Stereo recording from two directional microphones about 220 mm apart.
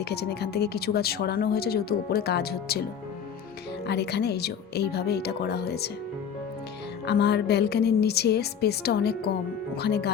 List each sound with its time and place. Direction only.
0.0 s speech: 50° left (ahead or behind)
3.8 s speech: 50° left (ahead or behind)
7.0 s speech: 50° left (ahead or behind)